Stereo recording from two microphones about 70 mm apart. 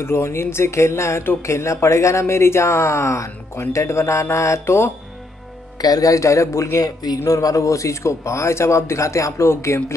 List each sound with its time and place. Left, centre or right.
0.0 s speech: left
5.8 s speech: left